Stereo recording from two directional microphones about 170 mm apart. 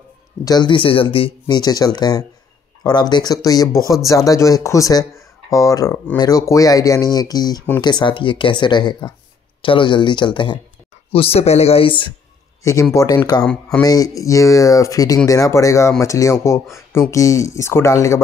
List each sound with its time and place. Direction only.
0.5 s speech: 25° left (ahead or behind)
13.4 s speech: 5° left (ahead or behind)
13.8 s speech: 20° left (ahead or behind)